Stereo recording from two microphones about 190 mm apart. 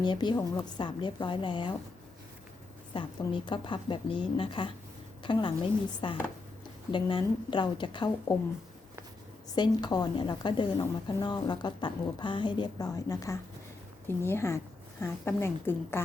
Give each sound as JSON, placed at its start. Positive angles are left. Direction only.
{"t": 0.0, "sound": "a woman's voice", "side_deg": 25}
{"t": 2.9, "sound": "a woman's voice", "side_deg": 25}
{"t": 9.6, "sound": "a woman's voice", "side_deg": 20}